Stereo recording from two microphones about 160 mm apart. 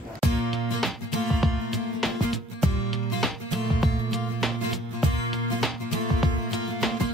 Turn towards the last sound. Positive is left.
turn(degrees=0)  # may be behind; listen again after turning